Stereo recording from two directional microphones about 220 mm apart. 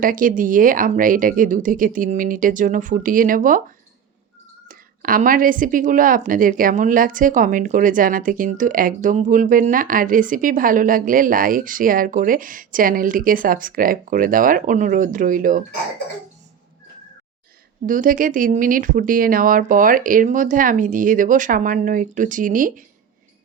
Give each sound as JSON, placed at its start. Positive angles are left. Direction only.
{"t": 0.0, "sound": "a woman's voice", "side_deg": -40}
{"t": 4.7, "sound": "a woman's voice", "side_deg": -40}
{"t": 17.8, "sound": "a woman's voice", "side_deg": -40}